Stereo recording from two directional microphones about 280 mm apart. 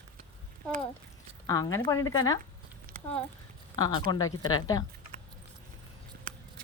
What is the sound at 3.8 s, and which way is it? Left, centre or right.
Speech, centre.